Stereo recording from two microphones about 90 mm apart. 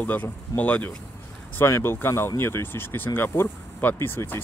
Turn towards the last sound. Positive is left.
turn(degrees=30)  # may be behind; listen again after turning